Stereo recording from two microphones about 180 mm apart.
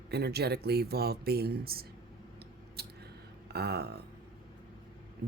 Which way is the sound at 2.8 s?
60° right (ahead or behind).